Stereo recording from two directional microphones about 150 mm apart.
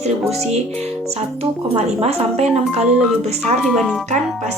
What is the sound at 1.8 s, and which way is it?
Speech, 45° right (ahead or behind).